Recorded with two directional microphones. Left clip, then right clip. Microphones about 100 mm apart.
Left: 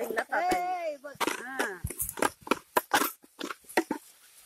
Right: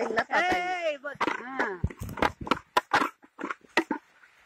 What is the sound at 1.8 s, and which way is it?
Horse, 20° left (ahead or behind).